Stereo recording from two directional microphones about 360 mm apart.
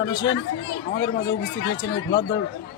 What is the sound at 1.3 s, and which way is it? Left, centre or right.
Speech, left.